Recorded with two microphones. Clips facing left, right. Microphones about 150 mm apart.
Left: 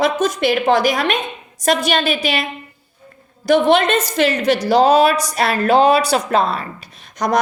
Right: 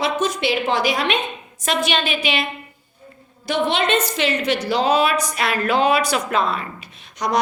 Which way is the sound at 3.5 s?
45° left (ahead or behind).